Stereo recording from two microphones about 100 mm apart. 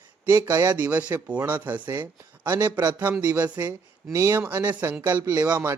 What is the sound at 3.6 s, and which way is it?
A man's voice, 25° right (ahead or behind).